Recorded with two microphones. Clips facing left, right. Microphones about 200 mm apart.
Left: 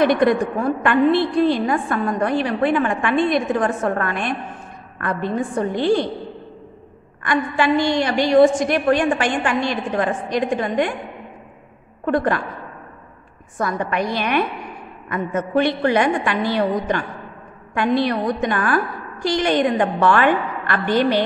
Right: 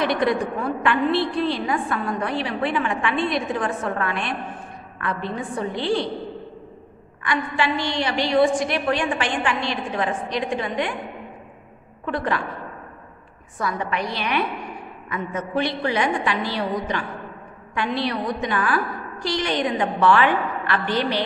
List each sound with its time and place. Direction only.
0.0 s a woman's voice: 50° left (ahead or behind)
7.2 s a woman's voice: 45° left (ahead or behind)
12.0 s a woman's voice: 45° left (ahead or behind)
13.6 s a woman's voice: 50° left (ahead or behind)